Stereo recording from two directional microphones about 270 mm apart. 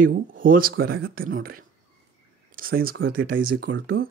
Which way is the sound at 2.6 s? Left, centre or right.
Right.